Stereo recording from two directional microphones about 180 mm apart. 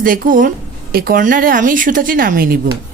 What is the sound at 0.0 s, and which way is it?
A woman's voice, 50° right (ahead or behind).